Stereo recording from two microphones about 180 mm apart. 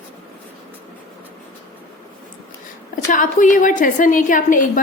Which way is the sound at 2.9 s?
45° left (ahead or behind).